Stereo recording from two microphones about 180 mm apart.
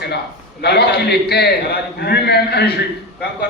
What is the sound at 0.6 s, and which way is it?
Speech, 65° left (ahead or behind).